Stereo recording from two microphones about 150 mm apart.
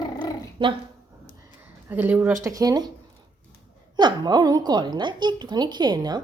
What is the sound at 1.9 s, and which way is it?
Speech, 15° right (ahead or behind).